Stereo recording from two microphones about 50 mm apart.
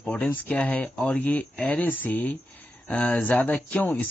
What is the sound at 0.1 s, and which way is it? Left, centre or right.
Speech, left.